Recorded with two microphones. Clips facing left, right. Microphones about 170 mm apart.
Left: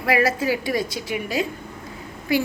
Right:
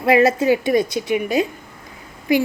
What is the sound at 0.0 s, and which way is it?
A woman's voice, 25° right (ahead or behind).